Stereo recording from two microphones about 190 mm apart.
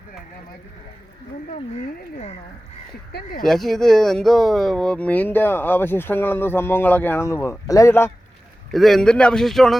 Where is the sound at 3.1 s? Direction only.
55° left (ahead or behind).